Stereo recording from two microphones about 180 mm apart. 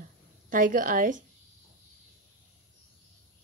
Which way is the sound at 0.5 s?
50° right (ahead or behind).